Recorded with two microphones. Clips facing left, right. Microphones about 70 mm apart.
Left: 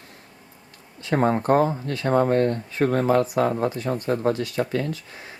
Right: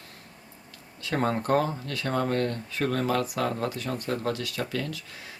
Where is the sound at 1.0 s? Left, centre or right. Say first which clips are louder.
Left 6 dB; left.